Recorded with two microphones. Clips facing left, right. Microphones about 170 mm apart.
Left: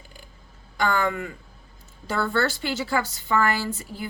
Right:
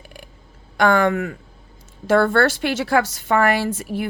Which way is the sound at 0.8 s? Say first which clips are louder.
Right 7 dB; 70° right (ahead or behind).